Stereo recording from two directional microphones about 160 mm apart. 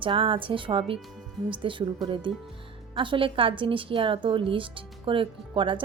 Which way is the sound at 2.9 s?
30° right (ahead or behind).